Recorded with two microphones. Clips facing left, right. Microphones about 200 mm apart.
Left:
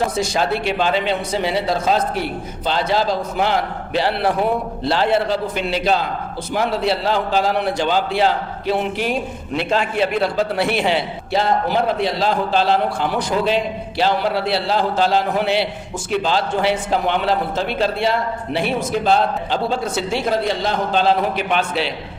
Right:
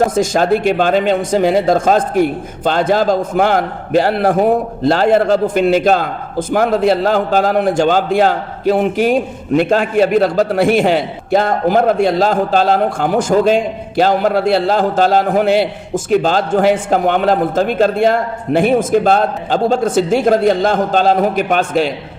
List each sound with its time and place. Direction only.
0.1 s a man's voice: 45° right (ahead or behind)